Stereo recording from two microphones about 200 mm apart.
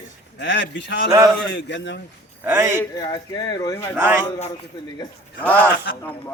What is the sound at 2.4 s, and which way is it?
Speech, 10° right (ahead or behind).